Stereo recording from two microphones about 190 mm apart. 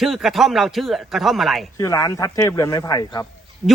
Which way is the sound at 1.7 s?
15° left (ahead or behind).